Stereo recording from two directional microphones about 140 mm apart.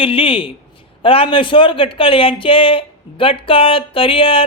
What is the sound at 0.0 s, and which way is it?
A man's voice, 40° left (ahead or behind).